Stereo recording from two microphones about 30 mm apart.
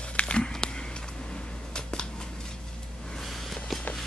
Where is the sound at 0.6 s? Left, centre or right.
Left.